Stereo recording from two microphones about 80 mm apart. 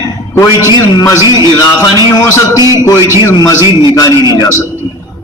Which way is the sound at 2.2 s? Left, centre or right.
Left.